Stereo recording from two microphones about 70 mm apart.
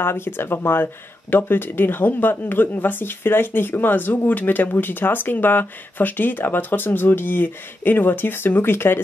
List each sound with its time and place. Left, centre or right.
0.0 s speech: left